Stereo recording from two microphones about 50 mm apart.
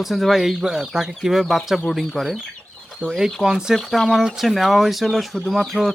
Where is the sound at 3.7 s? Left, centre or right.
Centre.